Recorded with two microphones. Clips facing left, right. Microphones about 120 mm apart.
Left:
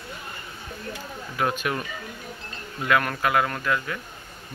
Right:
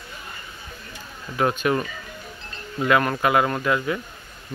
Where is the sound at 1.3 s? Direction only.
5° left (ahead or behind).